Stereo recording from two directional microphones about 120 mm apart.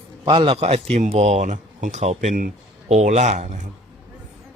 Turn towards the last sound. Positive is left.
turn(degrees=-85)